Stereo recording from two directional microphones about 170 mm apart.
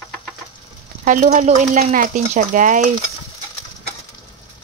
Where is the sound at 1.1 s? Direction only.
50° right (ahead or behind).